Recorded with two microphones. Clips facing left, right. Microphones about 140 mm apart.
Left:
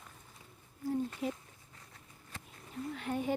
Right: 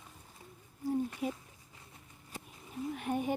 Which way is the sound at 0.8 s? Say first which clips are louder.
Right 1 dB; 15° right (ahead or behind).